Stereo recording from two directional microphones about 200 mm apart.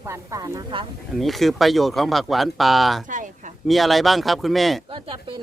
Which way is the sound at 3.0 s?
40° right (ahead or behind).